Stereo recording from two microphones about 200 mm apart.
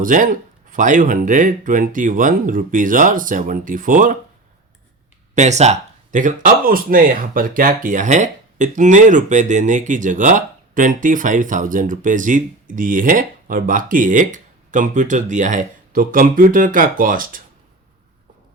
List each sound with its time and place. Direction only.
0.0 s speech: 40° right (ahead or behind)
5.3 s speech: 35° right (ahead or behind)